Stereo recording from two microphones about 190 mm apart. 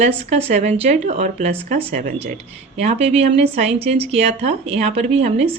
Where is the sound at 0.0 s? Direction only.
35° right (ahead or behind).